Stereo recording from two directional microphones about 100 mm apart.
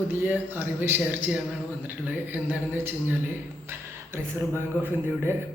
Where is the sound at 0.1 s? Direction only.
20° right (ahead or behind).